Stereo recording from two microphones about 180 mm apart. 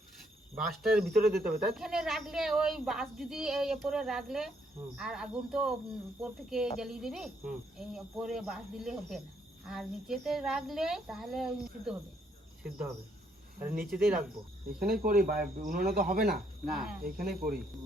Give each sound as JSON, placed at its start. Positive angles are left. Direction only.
{"t": 0.5, "sound": "a woman's voice", "side_deg": 0}
{"t": 1.2, "sound": "cricket", "side_deg": -60}
{"t": 1.7, "sound": "a woman's voice", "side_deg": 0}
{"t": 13.8, "sound": "a woman's voice", "side_deg": -5}
{"t": 14.8, "sound": "cricket", "side_deg": -60}
{"t": 15.5, "sound": "speech", "side_deg": -50}
{"t": 17.0, "sound": "cricket", "side_deg": -55}